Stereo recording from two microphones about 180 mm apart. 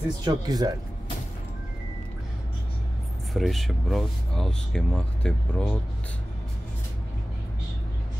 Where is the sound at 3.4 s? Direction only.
Centre (ahead or behind).